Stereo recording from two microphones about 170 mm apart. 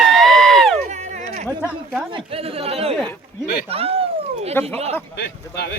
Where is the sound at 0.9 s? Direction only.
45° right (ahead or behind).